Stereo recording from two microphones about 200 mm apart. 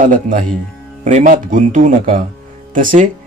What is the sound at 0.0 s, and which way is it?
A man's voice, 40° right (ahead or behind).